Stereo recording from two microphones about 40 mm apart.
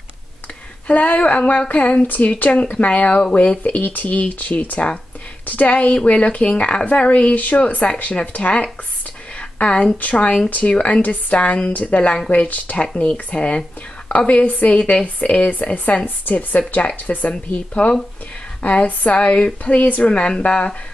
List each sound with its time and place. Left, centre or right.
0.8 s speech: left
1.7 s speech: left
9.4 s a sound: left
10.1 s speech: left
12.3 s speech: left
13.1 s speech: left
14.1 s speech: left